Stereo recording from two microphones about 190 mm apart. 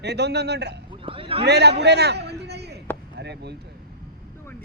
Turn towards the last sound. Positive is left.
turn(degrees=-60)  # may be behind; listen again after turning